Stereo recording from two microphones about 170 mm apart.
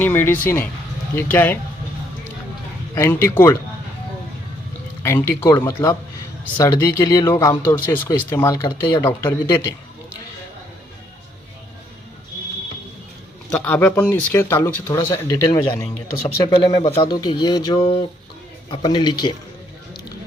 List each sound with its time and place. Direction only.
0.0 s speech: 15° left (ahead or behind)
2.9 s speech: 15° left (ahead or behind)
5.0 s speech: 15° left (ahead or behind)
13.5 s speech: 10° left (ahead or behind); by 19.3 s 25° left (ahead or behind)